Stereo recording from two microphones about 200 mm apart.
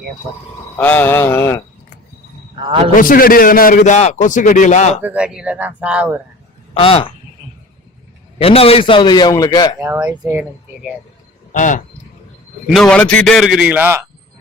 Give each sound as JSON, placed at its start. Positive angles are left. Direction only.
{"t": 0.8, "sound": "mantra", "side_deg": 10}
{"t": 2.6, "sound": "a man's voice", "side_deg": -25}
{"t": 2.9, "sound": "a man's voice", "side_deg": 45}
{"t": 5.0, "sound": "speech", "side_deg": -5}
{"t": 6.7, "sound": "a man's voice", "side_deg": 25}
{"t": 8.4, "sound": "a man's voice", "side_deg": 30}
{"t": 9.8, "sound": "speech", "side_deg": -15}
{"t": 11.5, "sound": "a man's voice", "side_deg": 40}
{"t": 12.6, "sound": "a man's voice", "side_deg": 0}